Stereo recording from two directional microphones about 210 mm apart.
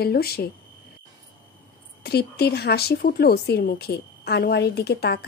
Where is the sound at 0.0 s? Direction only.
45° left (ahead or behind).